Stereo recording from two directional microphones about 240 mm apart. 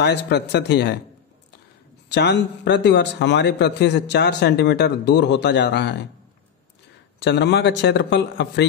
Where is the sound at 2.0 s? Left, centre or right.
Left.